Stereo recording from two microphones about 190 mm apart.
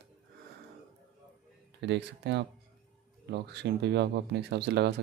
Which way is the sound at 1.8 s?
65° right (ahead or behind).